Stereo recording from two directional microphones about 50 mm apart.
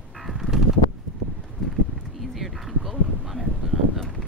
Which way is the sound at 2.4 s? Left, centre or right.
Centre.